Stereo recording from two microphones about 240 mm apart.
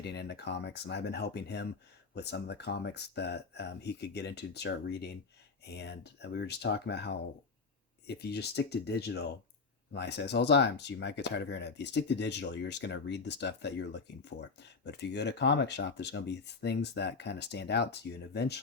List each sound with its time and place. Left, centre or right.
0.0 s speech: left